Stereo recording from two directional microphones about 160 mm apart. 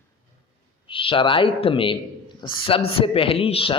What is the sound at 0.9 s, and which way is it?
A man's voice, 35° left (ahead or behind).